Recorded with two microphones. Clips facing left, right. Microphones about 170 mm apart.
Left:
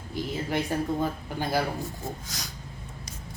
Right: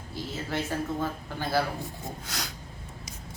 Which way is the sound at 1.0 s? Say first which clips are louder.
Left 2 dB; 15° left (ahead or behind).